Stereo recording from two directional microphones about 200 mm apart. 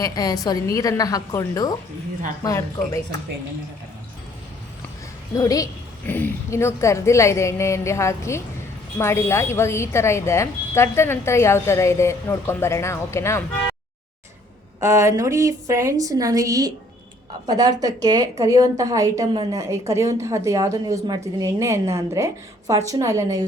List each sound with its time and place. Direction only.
0.0 s a woman's voice: 20° left (ahead or behind)
5.4 s a woman's voice: 15° left (ahead or behind)
14.8 s a woman's voice: 15° right (ahead or behind)